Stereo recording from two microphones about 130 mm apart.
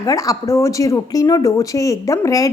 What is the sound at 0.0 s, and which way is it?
A woman's voice, 25° left (ahead or behind).